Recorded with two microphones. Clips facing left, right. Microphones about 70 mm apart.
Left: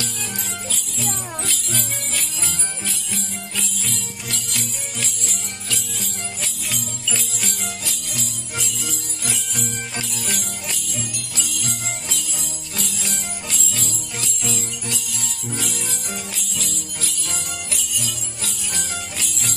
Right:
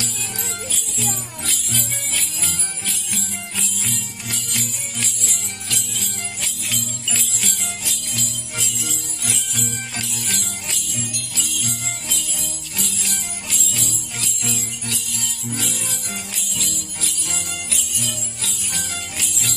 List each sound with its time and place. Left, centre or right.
0.7 s jingle bell: centre
3.1 s music: centre
7.3 s music: centre
9.9 s music: centre
14.4 s jingle bell: centre